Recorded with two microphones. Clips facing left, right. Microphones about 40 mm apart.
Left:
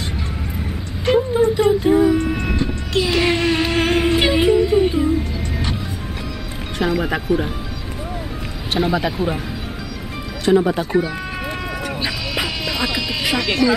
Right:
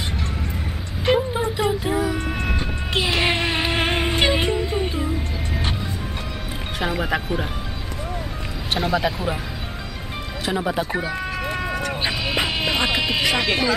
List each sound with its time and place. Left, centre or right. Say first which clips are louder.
1.0 s a sound: left 3 dB; centre
1.6 s speech: left 6 dB; centre
2.1 s train: left 6 dB; centre
2.5 s vehicle: left 3 dB; centre
3.1 s a sound: left 4 dB; centre
4.8 s music: left 8 dB; centre
6.8 s speech: left 4 dB; centre
8.7 s speech: left 3 dB; centre
10.4 s speech: left 8 dB; centre
12.0 s music: even; right